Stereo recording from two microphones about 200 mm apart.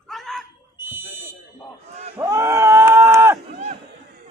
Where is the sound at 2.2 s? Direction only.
15° right (ahead or behind).